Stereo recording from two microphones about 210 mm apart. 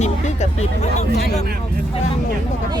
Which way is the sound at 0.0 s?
35° left (ahead or behind).